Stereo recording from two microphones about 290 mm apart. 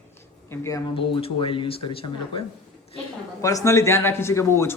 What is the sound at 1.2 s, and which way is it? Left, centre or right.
Speech, centre.